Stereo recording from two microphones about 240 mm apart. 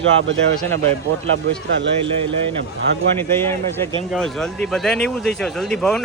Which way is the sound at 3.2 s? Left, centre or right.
Centre.